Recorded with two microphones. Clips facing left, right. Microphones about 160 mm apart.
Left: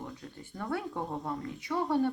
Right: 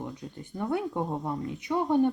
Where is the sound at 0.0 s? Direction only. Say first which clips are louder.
Right 5 dB; 20° right (ahead or behind).